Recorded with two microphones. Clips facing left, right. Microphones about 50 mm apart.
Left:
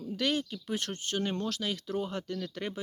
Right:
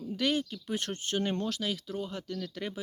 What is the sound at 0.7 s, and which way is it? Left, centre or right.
Speech, centre.